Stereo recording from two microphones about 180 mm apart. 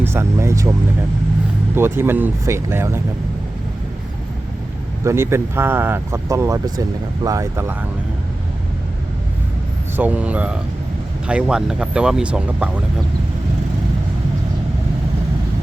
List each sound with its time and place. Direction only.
0.0 s speech: 15° right (ahead or behind)
1.7 s speech: 10° right (ahead or behind)
5.0 s speech: 15° right (ahead or behind)
10.0 s speech: 10° right (ahead or behind)